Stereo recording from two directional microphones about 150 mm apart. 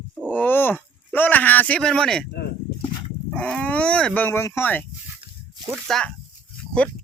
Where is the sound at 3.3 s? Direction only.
5° left (ahead or behind).